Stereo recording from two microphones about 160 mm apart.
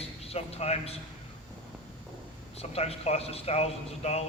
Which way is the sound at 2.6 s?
40° left (ahead or behind).